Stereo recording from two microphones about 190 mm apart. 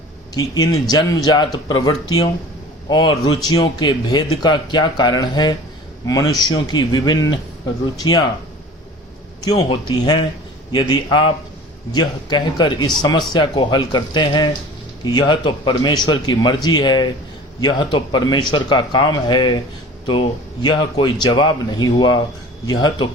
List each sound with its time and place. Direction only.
0.3 s speech: 20° left (ahead or behind)
9.4 s speech: 20° left (ahead or behind)